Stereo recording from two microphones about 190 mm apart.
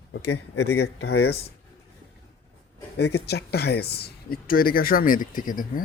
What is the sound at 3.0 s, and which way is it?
Speech, 60° left (ahead or behind).